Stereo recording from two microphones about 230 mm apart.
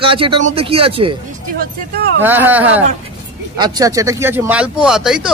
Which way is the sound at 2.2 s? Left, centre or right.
Centre.